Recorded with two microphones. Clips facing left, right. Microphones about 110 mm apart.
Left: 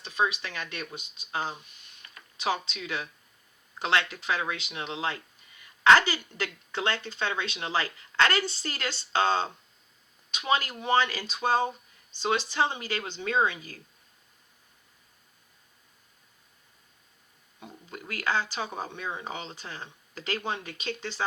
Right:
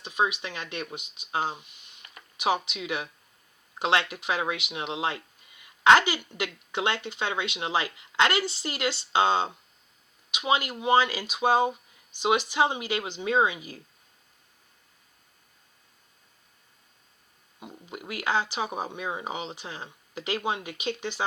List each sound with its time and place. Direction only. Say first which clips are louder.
0.0 s speech: right 1 dB; 15° right (ahead or behind)
17.6 s speech: right 2 dB; 15° right (ahead or behind)